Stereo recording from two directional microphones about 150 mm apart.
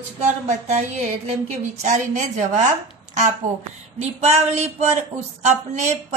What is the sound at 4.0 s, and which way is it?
Speech, 45° right (ahead or behind).